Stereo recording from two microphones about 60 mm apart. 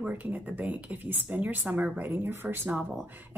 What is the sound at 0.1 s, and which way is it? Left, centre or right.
Speech, right.